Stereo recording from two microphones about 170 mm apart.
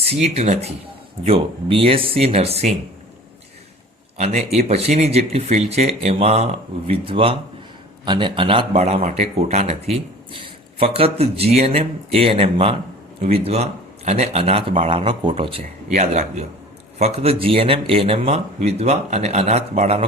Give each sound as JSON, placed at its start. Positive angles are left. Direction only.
{"t": 0.0, "sound": "speech", "side_deg": -40}
{"t": 4.2, "sound": "speech", "side_deg": -45}